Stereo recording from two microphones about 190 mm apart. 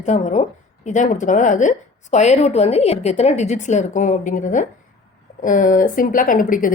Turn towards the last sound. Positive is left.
turn(degrees=45)  # may be behind; listen again after turning